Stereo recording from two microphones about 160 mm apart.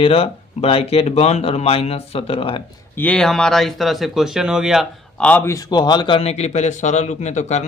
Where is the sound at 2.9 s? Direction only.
10° left (ahead or behind); by 7.6 s 45° left (ahead or behind).